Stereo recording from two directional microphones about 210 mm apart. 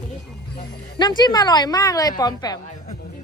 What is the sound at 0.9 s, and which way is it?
A woman's voice, 20° left (ahead or behind).